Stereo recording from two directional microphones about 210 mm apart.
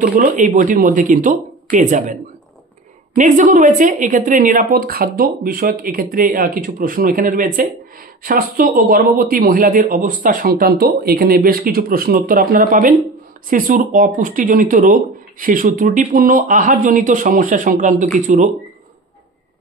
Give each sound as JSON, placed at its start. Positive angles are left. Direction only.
{"t": 0.0, "sound": "speech", "side_deg": -40}
{"t": 3.2, "sound": "speech", "side_deg": -35}